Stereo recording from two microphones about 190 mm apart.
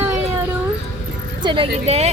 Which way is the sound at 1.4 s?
25° right (ahead or behind).